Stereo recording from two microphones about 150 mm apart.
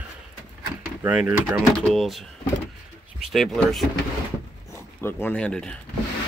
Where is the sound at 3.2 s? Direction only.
Centre (ahead or behind).